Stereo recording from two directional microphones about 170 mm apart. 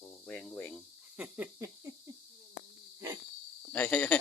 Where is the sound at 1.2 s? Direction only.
10° right (ahead or behind).